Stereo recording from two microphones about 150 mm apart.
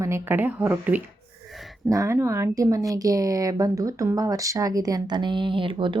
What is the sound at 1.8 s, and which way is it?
Speech, 20° right (ahead or behind).